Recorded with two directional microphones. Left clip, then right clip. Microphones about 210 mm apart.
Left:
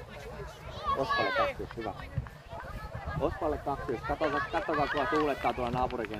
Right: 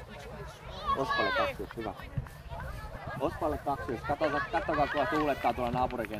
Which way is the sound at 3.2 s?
50° right (ahead or behind).